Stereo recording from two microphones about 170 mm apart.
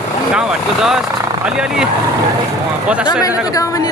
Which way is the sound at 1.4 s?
5° right (ahead or behind).